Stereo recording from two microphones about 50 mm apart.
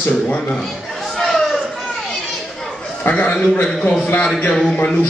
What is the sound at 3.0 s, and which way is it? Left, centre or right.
Speech, left.